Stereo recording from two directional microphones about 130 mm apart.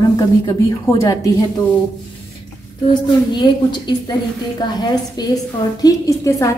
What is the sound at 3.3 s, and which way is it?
A woman's voice, 35° left (ahead or behind).